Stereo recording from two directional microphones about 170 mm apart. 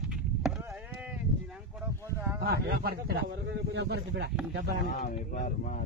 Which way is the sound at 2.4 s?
65° right (ahead or behind).